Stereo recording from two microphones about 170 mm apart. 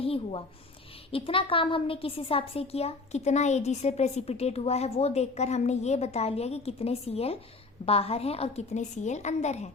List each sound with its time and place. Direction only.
0.0 s a woman's voice: 35° left (ahead or behind)